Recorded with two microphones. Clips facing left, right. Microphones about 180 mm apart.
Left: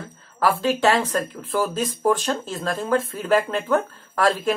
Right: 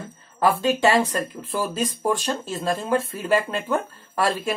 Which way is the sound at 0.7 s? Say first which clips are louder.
Even; 15° right (ahead or behind).